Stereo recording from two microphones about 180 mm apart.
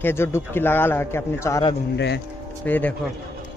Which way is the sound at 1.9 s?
75° left (ahead or behind).